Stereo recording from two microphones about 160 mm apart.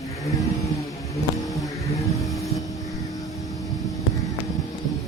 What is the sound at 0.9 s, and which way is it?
Vehicle, 20° left (ahead or behind).